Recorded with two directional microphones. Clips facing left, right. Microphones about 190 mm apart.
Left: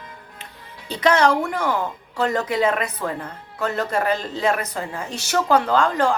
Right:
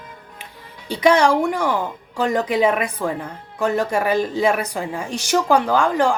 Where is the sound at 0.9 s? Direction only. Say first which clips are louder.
Right 2 dB; 10° right (ahead or behind).